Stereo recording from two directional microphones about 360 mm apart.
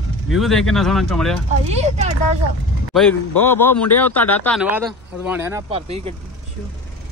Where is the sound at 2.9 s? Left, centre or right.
Centre.